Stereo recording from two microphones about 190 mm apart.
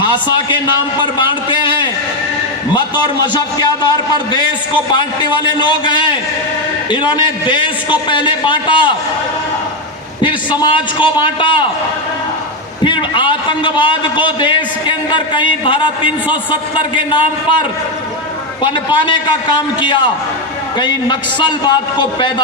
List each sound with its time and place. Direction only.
0.0 s a man's voice: 25° left (ahead or behind)
2.7 s a man's voice: 20° left (ahead or behind)
10.2 s a man's voice: 25° left (ahead or behind)
12.8 s a man's voice: 25° left (ahead or behind)
18.6 s a man's voice: 25° left (ahead or behind)